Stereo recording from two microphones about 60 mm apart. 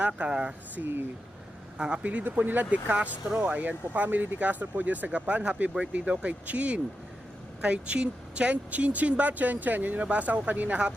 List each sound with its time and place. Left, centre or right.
0.2 s speech: centre
0.8 s speech: right
1.8 s speech: centre
2.2 s speech: right